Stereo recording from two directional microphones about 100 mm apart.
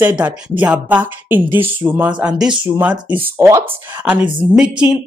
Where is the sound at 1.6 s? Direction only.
60° right (ahead or behind).